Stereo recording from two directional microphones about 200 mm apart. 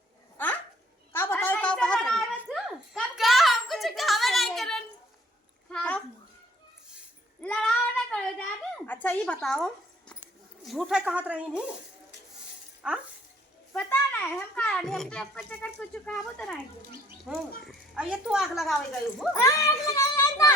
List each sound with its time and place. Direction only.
0.3 s dog: 10° left (ahead or behind)
1.1 s a sound: 10° left (ahead or behind)
5.6 s babbling: 5° left (ahead or behind)
7.4 s a sound: 5° left (ahead or behind)
10.7 s a child's voice: centre (ahead or behind)
12.8 s a child's voice: 5° right (ahead or behind)
13.7 s a child's voice: 10° left (ahead or behind)
19.3 s a child's voice: 15° left (ahead or behind)